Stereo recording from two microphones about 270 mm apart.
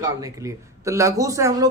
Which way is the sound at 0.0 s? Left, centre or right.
Centre.